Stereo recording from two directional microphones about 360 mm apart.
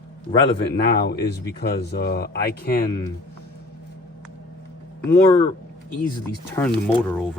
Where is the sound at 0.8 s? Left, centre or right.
Left.